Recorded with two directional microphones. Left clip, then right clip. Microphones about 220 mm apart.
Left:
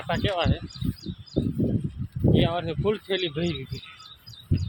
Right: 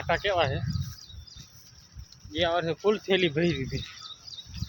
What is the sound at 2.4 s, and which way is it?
Speech, 10° right (ahead or behind).